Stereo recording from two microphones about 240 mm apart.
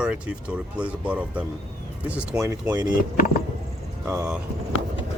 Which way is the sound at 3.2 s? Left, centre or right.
Left.